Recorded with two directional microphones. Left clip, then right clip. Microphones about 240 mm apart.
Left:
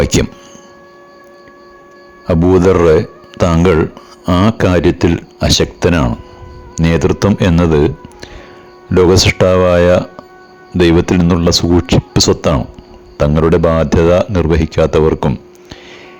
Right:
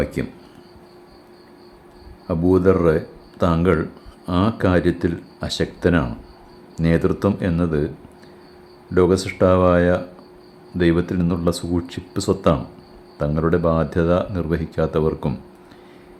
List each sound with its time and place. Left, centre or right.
0.0 s a man's voice: left
2.2 s a man's voice: left